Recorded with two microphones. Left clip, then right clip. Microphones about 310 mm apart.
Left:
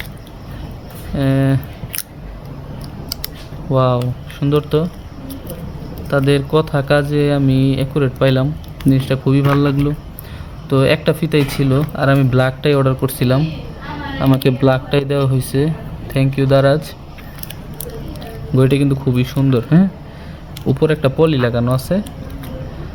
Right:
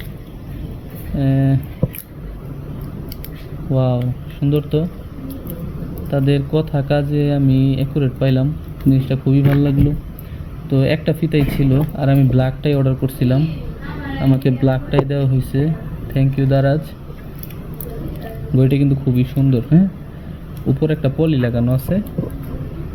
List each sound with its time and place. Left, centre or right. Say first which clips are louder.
1.1 s speech: left 3 dB; left
3.8 s speech: left 5 dB; left
6.1 s speech: left 4 dB; left
18.5 s speech: left 3 dB; left